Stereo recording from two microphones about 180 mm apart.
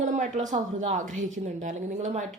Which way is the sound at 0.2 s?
45° right (ahead or behind).